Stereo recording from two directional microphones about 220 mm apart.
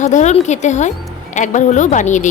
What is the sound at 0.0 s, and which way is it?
Speech, 30° left (ahead or behind).